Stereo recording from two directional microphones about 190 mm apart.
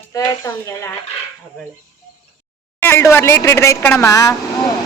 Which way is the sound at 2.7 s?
10° left (ahead or behind).